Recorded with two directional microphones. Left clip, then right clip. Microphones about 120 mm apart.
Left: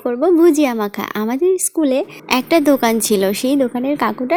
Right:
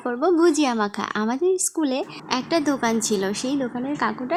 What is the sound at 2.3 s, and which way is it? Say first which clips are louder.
A woman's voice: left 9 dB; 55° left (ahead or behind).